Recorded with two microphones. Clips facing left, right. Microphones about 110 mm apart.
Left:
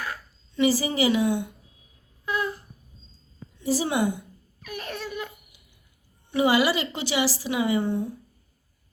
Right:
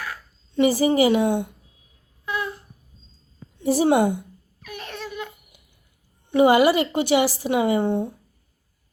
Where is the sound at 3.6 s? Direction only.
55° right (ahead or behind).